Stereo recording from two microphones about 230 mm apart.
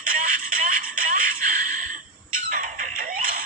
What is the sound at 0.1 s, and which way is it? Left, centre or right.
Music, right.